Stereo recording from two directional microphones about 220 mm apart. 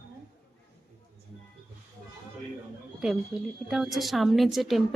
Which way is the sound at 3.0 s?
Centre (ahead or behind).